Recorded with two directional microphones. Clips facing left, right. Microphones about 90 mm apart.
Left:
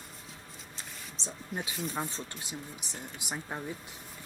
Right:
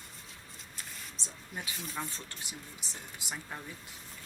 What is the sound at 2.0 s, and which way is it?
Speech, 25° left (ahead or behind).